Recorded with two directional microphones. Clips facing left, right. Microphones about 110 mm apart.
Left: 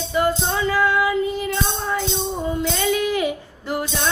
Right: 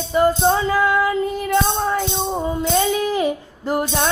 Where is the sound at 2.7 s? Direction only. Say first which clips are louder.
Right 4 dB; 35° right (ahead or behind).